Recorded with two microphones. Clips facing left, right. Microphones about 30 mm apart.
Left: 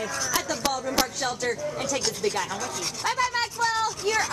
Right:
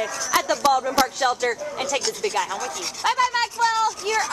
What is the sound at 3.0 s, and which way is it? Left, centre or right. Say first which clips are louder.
Speech: right 5 dB; centre.